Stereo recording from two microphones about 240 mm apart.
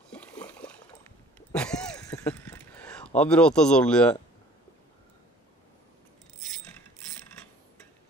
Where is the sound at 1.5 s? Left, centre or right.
Centre.